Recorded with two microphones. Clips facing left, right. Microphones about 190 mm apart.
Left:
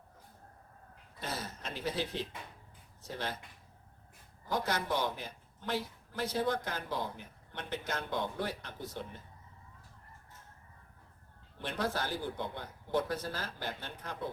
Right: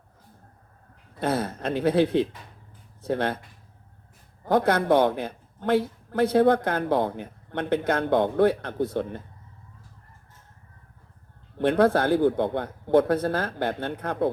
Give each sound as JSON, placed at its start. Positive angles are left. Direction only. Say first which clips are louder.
{"t": 1.2, "sound": "speech", "louder": "right 15 dB", "side_deg": -60}
{"t": 4.4, "sound": "speech", "louder": "right 13 dB", "side_deg": -60}
{"t": 11.6, "sound": "speech", "louder": "right 15 dB", "side_deg": -60}